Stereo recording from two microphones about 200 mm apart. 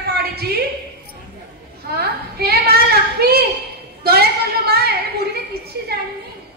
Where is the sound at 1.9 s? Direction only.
50° right (ahead or behind).